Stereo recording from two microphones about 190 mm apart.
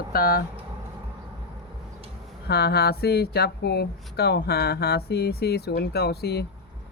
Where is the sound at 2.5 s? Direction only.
55° left (ahead or behind).